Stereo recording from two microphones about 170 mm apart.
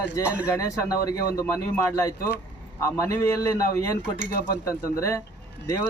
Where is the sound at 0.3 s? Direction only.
10° right (ahead or behind).